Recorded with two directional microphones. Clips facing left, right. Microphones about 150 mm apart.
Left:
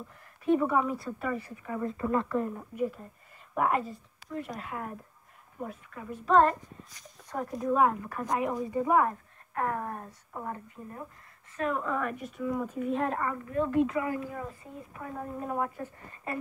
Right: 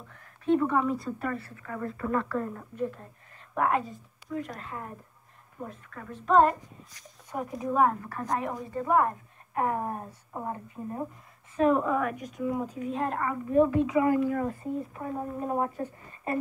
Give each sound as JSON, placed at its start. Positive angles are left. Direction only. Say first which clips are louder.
{"t": 0.1, "sound": "speech", "louder": "right 1 dB", "side_deg": 10}
{"t": 1.4, "sound": "speech", "louder": "left 2 dB", "side_deg": 15}
{"t": 7.2, "sound": "speech", "louder": "left 2 dB", "side_deg": -5}
{"t": 9.5, "sound": "a woman's voice", "louder": "right 3 dB", "side_deg": -20}
{"t": 11.9, "sound": "speech", "louder": "right 3 dB", "side_deg": -5}
{"t": 12.4, "sound": "a woman's voice", "louder": "right 1 dB", "side_deg": -20}
{"t": 12.9, "sound": "speech", "louder": "even", "side_deg": 0}
{"t": 13.3, "sound": "a woman's voice", "louder": "right 7 dB", "side_deg": -15}
{"t": 13.7, "sound": "speech", "louder": "even", "side_deg": 0}
{"t": 14.2, "sound": "speech", "louder": "right 10 dB", "side_deg": -60}
{"t": 15.0, "sound": "speech", "louder": "right 4 dB", "side_deg": -20}